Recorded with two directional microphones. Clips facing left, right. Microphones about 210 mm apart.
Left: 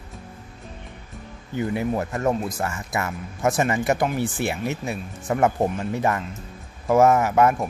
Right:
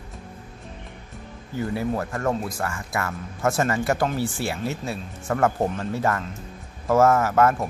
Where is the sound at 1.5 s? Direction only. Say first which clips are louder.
Left 2 dB; 20° left (ahead or behind).